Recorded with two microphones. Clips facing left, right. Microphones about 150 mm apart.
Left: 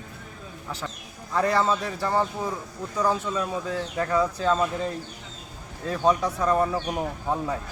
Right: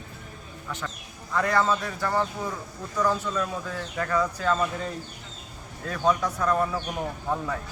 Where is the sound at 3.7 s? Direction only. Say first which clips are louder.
Left 3 dB; 25° left (ahead or behind).